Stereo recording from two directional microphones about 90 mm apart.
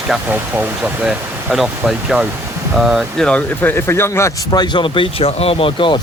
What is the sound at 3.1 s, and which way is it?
Speech, 10° left (ahead or behind).